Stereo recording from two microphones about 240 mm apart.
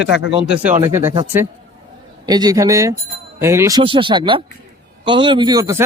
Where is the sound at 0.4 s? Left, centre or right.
Centre.